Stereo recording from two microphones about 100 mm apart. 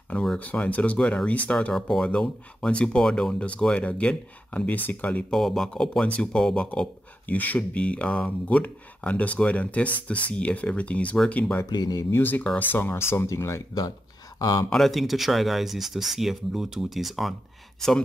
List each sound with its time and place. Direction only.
0.1 s speech: 10° left (ahead or behind)
5.3 s speech: 5° left (ahead or behind)
11.7 s speech: 40° left (ahead or behind)
12.1 s speech: 20° left (ahead or behind); by 14.7 s 40° left (ahead or behind)
14.7 s speech: centre (ahead or behind)